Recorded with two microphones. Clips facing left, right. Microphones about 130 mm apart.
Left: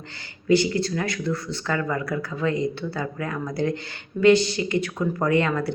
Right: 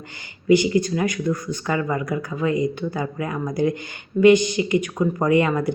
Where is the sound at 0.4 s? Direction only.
15° right (ahead or behind).